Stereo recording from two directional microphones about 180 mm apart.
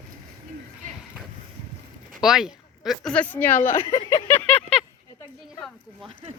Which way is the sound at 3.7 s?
25° left (ahead or behind).